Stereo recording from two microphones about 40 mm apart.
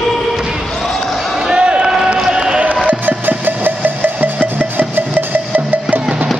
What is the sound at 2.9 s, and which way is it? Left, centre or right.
Music, right.